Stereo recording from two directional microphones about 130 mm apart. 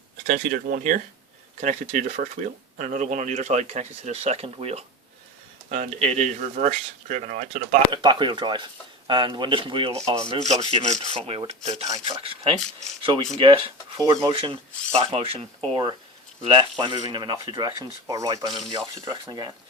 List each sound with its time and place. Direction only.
0.3 s speech: 90° right
1.6 s speech: 65° right (ahead or behind)
5.6 s speech: 65° right (ahead or behind)
7.9 s speech: 35° right (ahead or behind)
10.4 s speech: 55° right (ahead or behind)
11.1 s rub: 45° right (ahead or behind)
13.0 s speech: 45° right (ahead or behind)
14.0 s speech: 30° right (ahead or behind)
14.3 s rub: 40° right (ahead or behind)
16.4 s speech: 35° right (ahead or behind)
18.1 s speech: 25° right (ahead or behind)